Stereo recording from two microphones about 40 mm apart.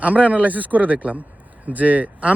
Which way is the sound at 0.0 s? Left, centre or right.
Right.